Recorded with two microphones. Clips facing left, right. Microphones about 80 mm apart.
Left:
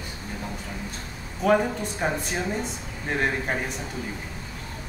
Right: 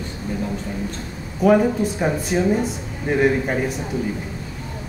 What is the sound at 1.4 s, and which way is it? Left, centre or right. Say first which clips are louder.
A woman's voice: right 6 dB; centre.